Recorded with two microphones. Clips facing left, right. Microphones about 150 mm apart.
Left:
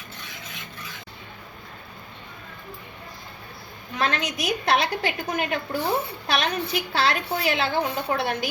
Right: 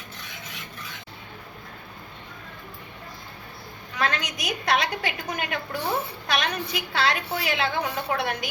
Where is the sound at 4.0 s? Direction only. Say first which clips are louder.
Left 2 dB; 30° left (ahead or behind).